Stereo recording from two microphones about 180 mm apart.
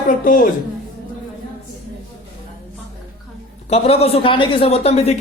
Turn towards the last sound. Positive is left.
turn(degrees=35)  # may be behind; listen again after turning